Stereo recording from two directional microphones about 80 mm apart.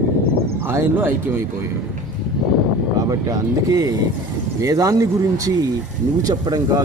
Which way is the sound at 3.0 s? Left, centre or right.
Right.